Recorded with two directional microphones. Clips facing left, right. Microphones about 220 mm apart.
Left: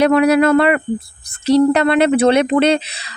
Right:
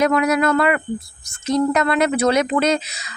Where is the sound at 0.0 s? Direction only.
30° left (ahead or behind).